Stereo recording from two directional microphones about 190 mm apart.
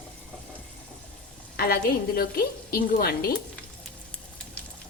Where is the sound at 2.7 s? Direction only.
55° left (ahead or behind).